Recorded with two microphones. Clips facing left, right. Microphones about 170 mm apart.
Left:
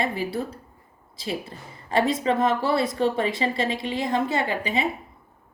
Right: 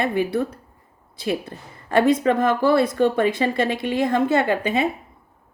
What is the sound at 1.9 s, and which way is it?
Speech, 55° right (ahead or behind).